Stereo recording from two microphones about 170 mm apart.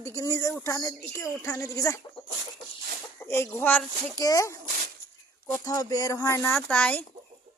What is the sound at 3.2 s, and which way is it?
Speech, 15° left (ahead or behind).